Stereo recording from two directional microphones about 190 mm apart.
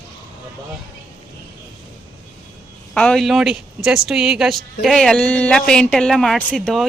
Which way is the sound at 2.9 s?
5° left (ahead or behind).